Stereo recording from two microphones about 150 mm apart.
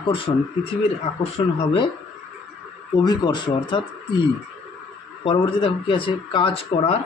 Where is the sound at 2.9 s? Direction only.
25° left (ahead or behind).